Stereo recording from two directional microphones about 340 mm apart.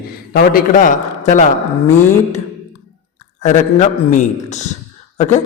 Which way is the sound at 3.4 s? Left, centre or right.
Left.